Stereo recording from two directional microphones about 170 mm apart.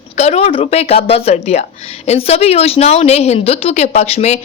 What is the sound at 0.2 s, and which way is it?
A woman's voice, 40° left (ahead or behind).